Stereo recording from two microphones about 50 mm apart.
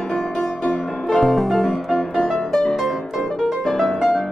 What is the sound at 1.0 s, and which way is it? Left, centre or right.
Music, centre.